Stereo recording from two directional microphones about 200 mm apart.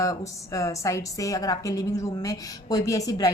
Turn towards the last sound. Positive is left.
turn(degrees=20)  # may be behind; listen again after turning